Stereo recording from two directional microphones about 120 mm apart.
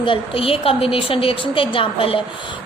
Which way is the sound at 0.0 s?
50° left (ahead or behind).